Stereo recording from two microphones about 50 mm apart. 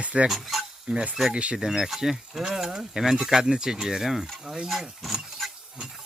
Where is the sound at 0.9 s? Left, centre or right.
Right.